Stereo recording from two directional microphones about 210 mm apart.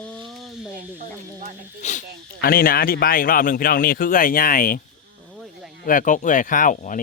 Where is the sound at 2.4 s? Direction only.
45° left (ahead or behind).